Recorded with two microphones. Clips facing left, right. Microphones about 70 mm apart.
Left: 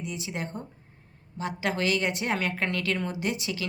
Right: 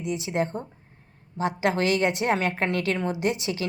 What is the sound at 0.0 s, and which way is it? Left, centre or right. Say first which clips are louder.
A woman's voice: right 8 dB; right.